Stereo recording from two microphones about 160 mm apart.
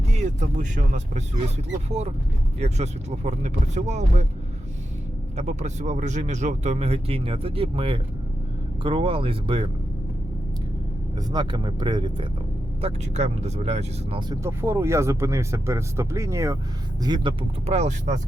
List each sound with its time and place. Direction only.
0.2 s speech: 50° right (ahead or behind)
5.4 s speech: 45° right (ahead or behind)
11.3 s speech: 25° right (ahead or behind)
12.8 s speech: 40° right (ahead or behind)
14.2 s speech: 20° right (ahead or behind)
17.7 s speech: 45° right (ahead or behind)